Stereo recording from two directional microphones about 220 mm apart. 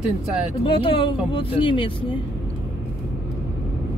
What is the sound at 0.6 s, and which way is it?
Speech, 25° left (ahead or behind).